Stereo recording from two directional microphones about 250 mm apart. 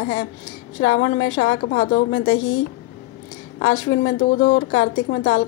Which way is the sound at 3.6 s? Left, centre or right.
Left.